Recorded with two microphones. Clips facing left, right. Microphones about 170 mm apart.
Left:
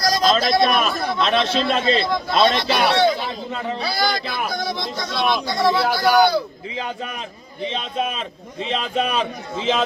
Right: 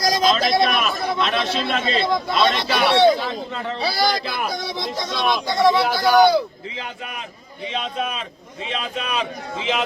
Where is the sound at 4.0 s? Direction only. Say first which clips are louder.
Right 2 dB; centre (ahead or behind).